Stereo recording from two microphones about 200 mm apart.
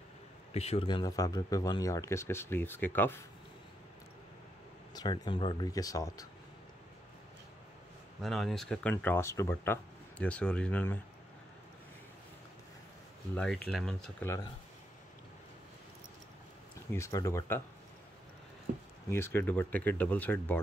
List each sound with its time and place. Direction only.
0.5 s speech: 30° left (ahead or behind); by 3.2 s 10° left (ahead or behind)
4.9 s speech: 20° left (ahead or behind)
8.2 s speech: centre (ahead or behind)
13.3 s speech: 5° left (ahead or behind)
16.9 s speech: 15° left (ahead or behind)
19.0 s speech: 10° left (ahead or behind)